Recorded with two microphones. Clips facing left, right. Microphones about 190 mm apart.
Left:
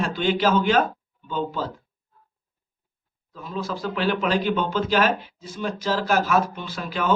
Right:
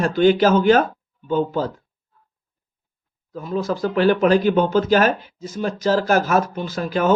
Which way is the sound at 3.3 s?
45° right (ahead or behind).